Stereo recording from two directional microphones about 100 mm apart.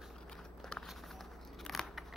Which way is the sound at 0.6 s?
5° left (ahead or behind).